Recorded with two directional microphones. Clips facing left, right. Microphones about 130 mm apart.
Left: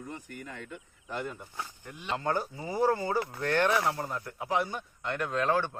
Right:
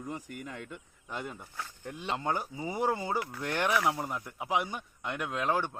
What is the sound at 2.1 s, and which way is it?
Speech, 15° right (ahead or behind).